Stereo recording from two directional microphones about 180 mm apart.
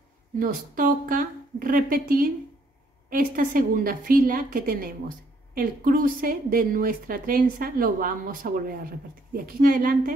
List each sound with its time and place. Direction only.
0.4 s a woman's voice: 50° right (ahead or behind)